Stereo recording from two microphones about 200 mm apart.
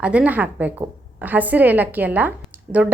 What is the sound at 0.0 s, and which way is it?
A woman's voice, 5° right (ahead or behind).